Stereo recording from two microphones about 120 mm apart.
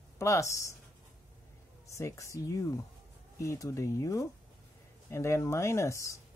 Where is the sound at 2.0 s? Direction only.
25° left (ahead or behind).